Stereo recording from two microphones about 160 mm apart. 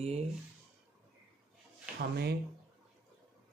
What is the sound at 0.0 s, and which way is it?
Speech, 40° right (ahead or behind).